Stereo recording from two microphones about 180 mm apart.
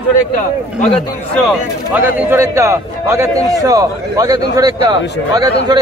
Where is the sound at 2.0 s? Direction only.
15° right (ahead or behind).